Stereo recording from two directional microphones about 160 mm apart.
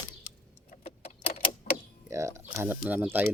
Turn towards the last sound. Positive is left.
turn(degrees=-10)  # may be behind; listen again after turning